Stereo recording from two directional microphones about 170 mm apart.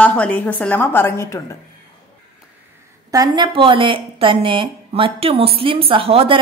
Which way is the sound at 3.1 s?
25° right (ahead or behind).